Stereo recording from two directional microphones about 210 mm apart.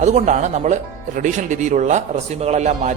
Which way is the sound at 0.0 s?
35° right (ahead or behind).